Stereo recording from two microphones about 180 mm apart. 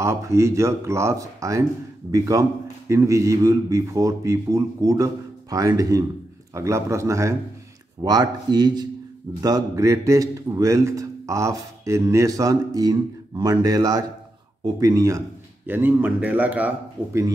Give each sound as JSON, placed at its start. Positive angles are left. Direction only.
{"t": 0.0, "sound": "a man's voice", "side_deg": -15}